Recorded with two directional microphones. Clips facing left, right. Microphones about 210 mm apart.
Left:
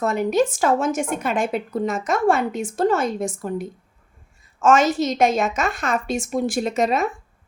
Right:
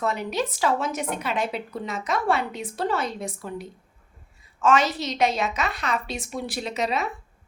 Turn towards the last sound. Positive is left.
turn(degrees=50)  # may be behind; listen again after turning